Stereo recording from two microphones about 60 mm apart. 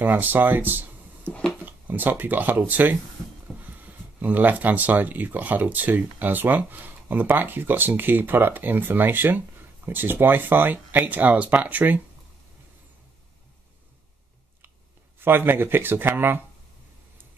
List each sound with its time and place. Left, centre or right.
0.0 s speech: right
3.5 s a sound: centre
3.8 s speech: right
15.1 s speech: right